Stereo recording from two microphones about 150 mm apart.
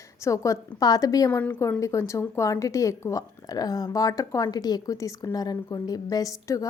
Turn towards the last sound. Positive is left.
turn(degrees=25)  # may be behind; listen again after turning